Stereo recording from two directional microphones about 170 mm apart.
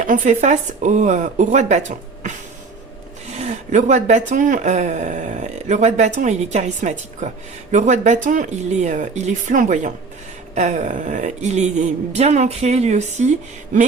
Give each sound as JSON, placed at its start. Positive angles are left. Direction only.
{"t": 0.0, "sound": "speech", "side_deg": -50}